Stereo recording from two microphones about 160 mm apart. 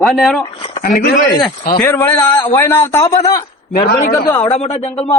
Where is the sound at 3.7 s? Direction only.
65° left (ahead or behind).